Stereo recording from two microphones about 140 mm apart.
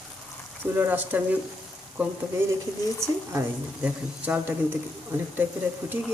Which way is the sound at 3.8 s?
10° right (ahead or behind).